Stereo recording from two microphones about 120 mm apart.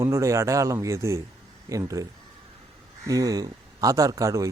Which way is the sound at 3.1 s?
30° right (ahead or behind).